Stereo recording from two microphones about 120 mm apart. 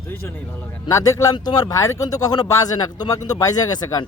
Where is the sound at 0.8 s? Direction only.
25° left (ahead or behind).